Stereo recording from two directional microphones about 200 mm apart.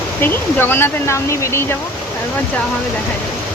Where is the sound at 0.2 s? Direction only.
10° left (ahead or behind).